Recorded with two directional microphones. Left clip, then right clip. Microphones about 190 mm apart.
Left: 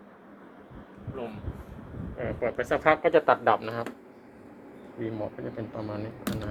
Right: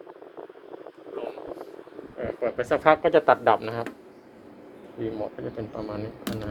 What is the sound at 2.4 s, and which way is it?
Speech, 15° right (ahead or behind).